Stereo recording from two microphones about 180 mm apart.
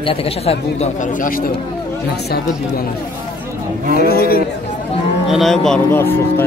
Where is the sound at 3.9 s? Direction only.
55° left (ahead or behind).